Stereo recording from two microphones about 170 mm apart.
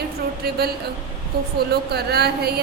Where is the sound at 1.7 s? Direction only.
70° right (ahead or behind).